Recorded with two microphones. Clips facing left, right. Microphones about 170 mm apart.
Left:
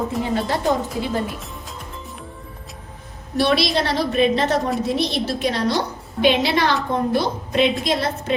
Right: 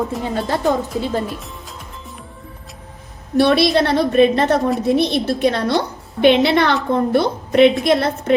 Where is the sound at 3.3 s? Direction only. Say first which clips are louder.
Right 5 dB; 55° right (ahead or behind).